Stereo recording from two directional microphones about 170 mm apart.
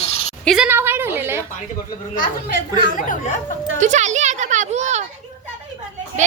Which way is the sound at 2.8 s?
50° left (ahead or behind).